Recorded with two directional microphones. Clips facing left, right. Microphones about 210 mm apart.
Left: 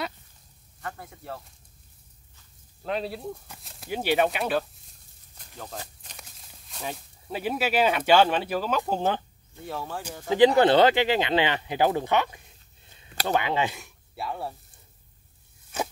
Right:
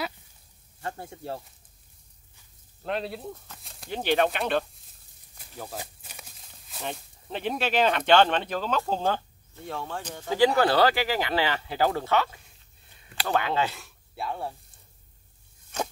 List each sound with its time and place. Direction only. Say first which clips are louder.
0.7 s speech: right 2 dB; 30° right (ahead or behind)
2.8 s speech: left 1 dB; centre (ahead or behind)
5.4 s speech: right 1 dB; 5° right (ahead or behind); by 9.2 s 15° left (ahead or behind)
9.7 s speech: even; 5° left (ahead or behind)
10.3 s speech: left 4 dB; 20° left (ahead or behind)
14.1 s speech: even; centre (ahead or behind)